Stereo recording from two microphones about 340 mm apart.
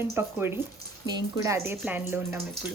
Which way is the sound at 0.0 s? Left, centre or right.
Centre.